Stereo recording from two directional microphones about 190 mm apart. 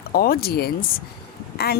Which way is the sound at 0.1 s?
50° left (ahead or behind).